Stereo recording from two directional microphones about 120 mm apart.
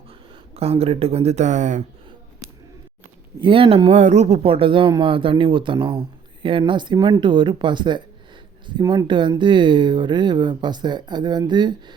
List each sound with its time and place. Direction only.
0.1 s speech: 55° right (ahead or behind); by 1.8 s 90° right
3.4 s speech: 50° right (ahead or behind)
3.9 s speech: 75° right (ahead or behind); by 11.9 s 40° right (ahead or behind)